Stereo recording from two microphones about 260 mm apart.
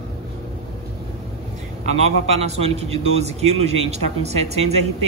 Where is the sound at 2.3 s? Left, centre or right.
Right.